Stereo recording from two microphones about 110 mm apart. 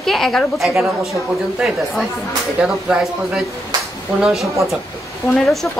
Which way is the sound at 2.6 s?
10° right (ahead or behind).